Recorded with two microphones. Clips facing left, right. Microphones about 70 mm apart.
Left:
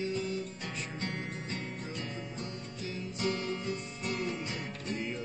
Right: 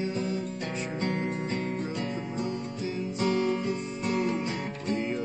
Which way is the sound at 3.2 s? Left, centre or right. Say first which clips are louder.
Right 7 dB; right.